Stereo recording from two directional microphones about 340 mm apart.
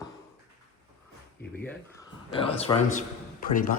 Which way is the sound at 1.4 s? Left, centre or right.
Centre.